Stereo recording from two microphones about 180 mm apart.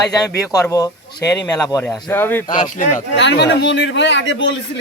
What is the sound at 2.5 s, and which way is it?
Speech, 45° left (ahead or behind).